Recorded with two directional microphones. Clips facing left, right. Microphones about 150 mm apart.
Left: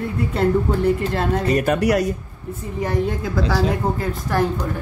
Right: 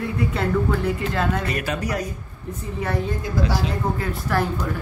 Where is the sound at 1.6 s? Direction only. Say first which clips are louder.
Left 8 dB; 75° left (ahead or behind).